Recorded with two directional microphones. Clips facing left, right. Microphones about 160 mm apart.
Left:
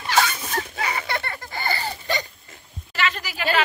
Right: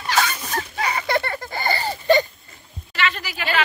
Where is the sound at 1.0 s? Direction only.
40° right (ahead or behind).